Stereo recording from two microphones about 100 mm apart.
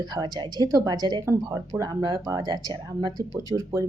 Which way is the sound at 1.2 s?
30° right (ahead or behind).